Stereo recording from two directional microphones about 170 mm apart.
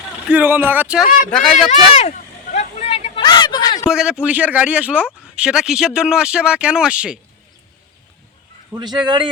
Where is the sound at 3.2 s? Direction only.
25° left (ahead or behind).